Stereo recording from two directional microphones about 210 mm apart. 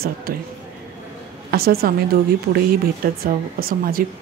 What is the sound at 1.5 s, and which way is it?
Speech, 45° right (ahead or behind).